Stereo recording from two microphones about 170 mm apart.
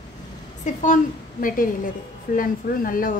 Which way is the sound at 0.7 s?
45° left (ahead or behind).